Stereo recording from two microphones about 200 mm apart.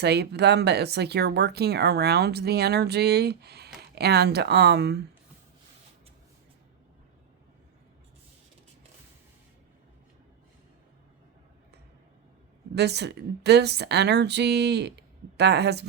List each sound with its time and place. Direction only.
0.0 s speech: 55° right (ahead or behind)
12.7 s speech: 55° right (ahead or behind)